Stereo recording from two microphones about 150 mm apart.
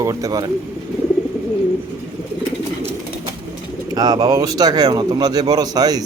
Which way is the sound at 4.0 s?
25° right (ahead or behind).